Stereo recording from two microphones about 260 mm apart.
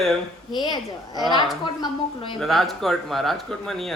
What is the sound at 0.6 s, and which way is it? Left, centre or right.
Speech, centre.